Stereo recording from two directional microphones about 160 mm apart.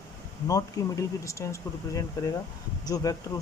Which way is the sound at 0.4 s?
20° left (ahead or behind).